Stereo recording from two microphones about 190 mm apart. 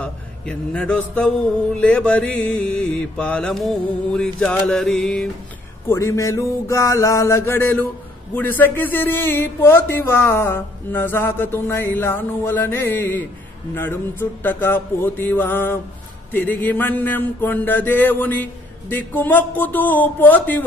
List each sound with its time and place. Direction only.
0.0 s a man's voice: 5° left (ahead or behind)
1.8 s mantra: 5° left (ahead or behind)
5.9 s speech: 15° left (ahead or behind)